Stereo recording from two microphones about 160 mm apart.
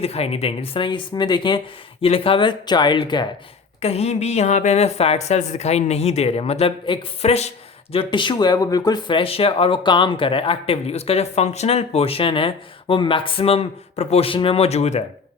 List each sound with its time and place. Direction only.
0.0 s speech: 40° left (ahead or behind)
3.8 s speech: 40° left (ahead or behind)
7.9 s speech: 30° left (ahead or behind)